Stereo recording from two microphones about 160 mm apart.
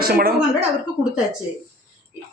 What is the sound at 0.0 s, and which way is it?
Speech, 70° right (ahead or behind).